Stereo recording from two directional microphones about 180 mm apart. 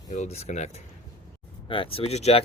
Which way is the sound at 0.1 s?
40° left (ahead or behind).